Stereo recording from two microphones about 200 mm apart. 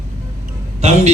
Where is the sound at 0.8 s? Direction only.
35° right (ahead or behind).